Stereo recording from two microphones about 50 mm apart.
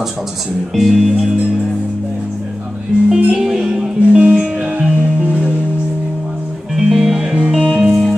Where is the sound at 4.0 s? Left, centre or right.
Right.